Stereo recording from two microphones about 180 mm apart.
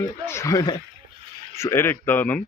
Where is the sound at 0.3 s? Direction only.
15° left (ahead or behind).